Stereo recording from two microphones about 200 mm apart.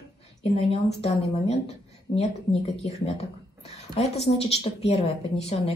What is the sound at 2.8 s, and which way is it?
A woman's voice, 30° left (ahead or behind).